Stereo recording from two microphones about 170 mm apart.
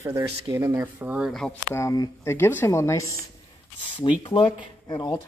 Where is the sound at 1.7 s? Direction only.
20° left (ahead or behind).